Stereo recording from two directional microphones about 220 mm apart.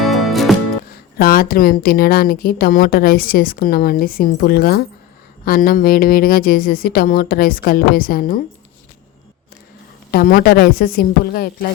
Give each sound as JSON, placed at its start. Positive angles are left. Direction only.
{"t": 0.0, "sound": "music", "side_deg": 0}
{"t": 1.2, "sound": "a woman's voice", "side_deg": 40}
{"t": 10.1, "sound": "a woman's voice", "side_deg": 45}